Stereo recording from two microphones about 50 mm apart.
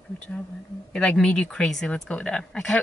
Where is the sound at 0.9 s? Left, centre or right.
Left.